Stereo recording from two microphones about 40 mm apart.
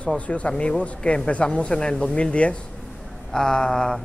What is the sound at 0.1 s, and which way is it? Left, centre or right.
Speech, left.